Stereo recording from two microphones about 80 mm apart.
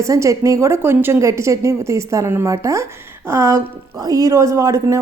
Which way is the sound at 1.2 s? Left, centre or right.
Right.